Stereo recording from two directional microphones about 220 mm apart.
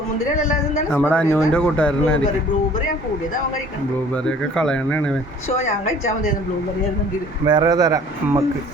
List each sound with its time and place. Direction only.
0.9 s speech: 10° left (ahead or behind)
4.1 s speech: 5° left (ahead or behind)
7.4 s speech: 20° right (ahead or behind)